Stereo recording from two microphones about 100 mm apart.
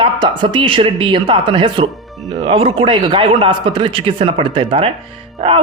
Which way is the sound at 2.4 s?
70° right (ahead or behind).